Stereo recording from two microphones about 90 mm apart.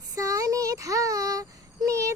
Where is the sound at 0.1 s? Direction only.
40° right (ahead or behind).